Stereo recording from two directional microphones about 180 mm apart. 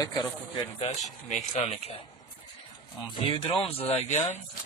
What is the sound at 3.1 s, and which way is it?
Speech, 30° left (ahead or behind).